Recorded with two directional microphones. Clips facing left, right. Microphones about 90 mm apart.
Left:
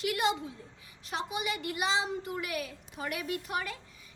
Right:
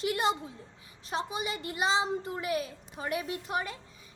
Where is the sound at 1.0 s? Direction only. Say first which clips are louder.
Right 1 dB; 30° right (ahead or behind).